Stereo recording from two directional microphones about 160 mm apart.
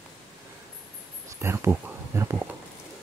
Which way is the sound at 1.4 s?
15° right (ahead or behind).